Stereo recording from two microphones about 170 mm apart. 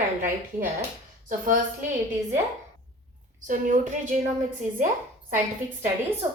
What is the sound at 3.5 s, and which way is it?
Speech, 50° right (ahead or behind).